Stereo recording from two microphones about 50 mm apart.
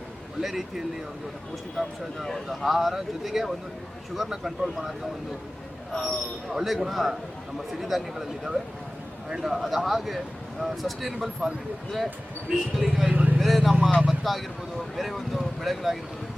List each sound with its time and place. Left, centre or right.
0.4 s speech: centre
5.9 s speech: centre
6.5 s speech: centre
12.5 s speech: centre
13.1 s vehicle: right
13.4 s speech: centre